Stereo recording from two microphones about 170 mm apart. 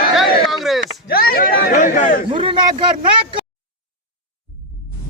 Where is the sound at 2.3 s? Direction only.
30° right (ahead or behind).